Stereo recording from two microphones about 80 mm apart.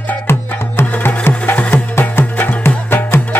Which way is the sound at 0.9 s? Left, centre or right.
Centre.